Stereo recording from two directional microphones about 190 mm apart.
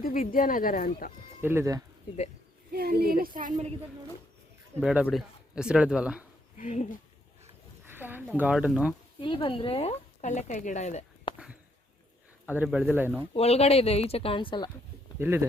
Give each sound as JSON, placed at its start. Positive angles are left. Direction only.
{"t": 0.0, "sound": "speech", "side_deg": 50}
{"t": 1.4, "sound": "speech", "side_deg": -10}
{"t": 2.7, "sound": "a woman's voice", "side_deg": -55}
{"t": 4.8, "sound": "speech", "side_deg": -5}
{"t": 6.6, "sound": "speech", "side_deg": 40}
{"t": 7.9, "sound": "a sound", "side_deg": -10}
{"t": 8.4, "sound": "speech", "side_deg": -5}
{"t": 9.2, "sound": "speech", "side_deg": 25}
{"t": 10.2, "sound": "speech", "side_deg": 40}
{"t": 11.3, "sound": "a sound", "side_deg": 25}
{"t": 12.5, "sound": "speech", "side_deg": -10}
{"t": 13.3, "sound": "speech", "side_deg": 30}
{"t": 15.2, "sound": "speech", "side_deg": -15}